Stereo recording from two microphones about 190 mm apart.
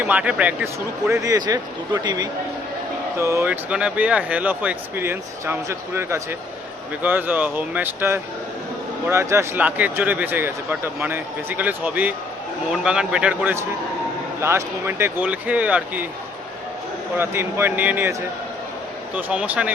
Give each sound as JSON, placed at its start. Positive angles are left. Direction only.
{"t": 0.1, "sound": "a man's voice", "side_deg": -5}
{"t": 17.2, "sound": "speech", "side_deg": -10}